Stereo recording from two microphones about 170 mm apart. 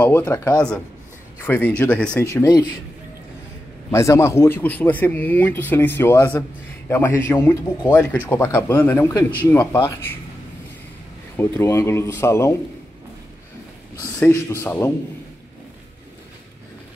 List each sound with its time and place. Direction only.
0.0 s speech: 10° left (ahead or behind)
2.2 s speech: 20° left (ahead or behind)
3.9 s speech: 15° left (ahead or behind)
11.3 s speech: 15° left (ahead or behind)
14.2 s speech: 15° left (ahead or behind)